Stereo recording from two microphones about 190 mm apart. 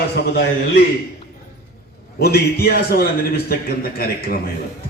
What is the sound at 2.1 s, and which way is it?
A man's voice, 55° left (ahead or behind).